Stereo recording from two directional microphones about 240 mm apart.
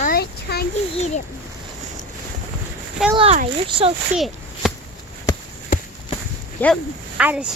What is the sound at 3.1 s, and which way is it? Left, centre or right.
Speech, right.